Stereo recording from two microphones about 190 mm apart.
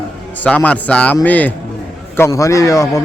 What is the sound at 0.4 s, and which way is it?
Speech, 5° left (ahead or behind).